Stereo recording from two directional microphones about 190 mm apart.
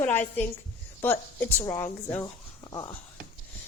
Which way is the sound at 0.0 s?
10° left (ahead or behind).